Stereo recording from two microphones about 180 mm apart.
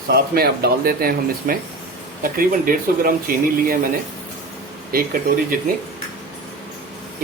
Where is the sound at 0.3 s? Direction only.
60° right (ahead or behind).